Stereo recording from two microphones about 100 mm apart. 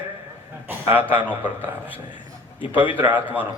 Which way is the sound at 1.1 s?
15° right (ahead or behind).